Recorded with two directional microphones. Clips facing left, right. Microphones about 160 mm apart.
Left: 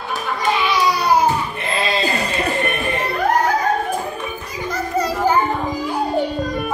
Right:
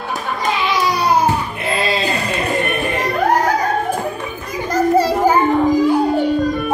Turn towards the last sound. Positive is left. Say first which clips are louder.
# right 7 dB
turn(degrees=-30)  # may be behind; listen again after turning